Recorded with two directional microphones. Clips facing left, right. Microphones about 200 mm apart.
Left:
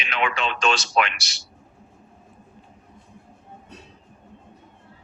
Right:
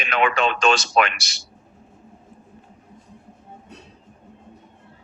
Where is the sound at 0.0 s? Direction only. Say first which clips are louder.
Right 5 dB; 50° right (ahead or behind).